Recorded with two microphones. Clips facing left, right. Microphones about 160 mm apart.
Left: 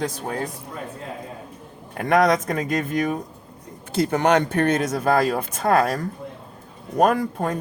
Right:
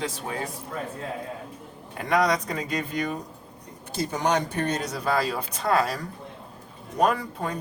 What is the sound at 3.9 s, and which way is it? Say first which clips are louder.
Speech: left 6 dB; 60° left (ahead or behind).